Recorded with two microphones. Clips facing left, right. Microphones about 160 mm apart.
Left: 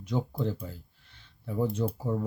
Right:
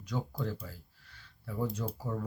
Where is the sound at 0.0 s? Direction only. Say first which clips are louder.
Left 6 dB; 25° left (ahead or behind).